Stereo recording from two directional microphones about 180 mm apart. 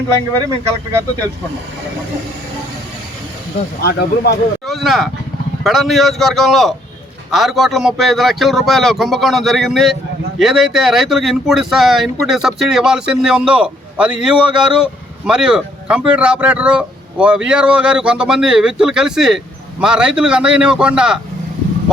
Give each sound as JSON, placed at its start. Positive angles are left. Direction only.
{"t": 0.3, "sound": "speech", "side_deg": -20}
{"t": 3.8, "sound": "speech", "side_deg": 60}
{"t": 4.6, "sound": "speech", "side_deg": 0}